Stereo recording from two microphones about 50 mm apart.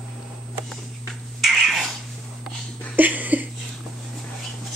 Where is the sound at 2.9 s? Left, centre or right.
Right.